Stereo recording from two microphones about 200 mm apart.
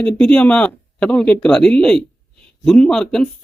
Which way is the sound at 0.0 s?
5° left (ahead or behind).